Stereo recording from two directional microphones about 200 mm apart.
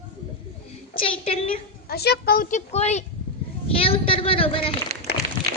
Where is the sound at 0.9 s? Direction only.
25° left (ahead or behind).